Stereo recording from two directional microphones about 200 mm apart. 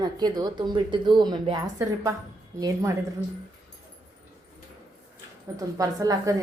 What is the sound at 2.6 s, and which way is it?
Speech, 15° right (ahead or behind).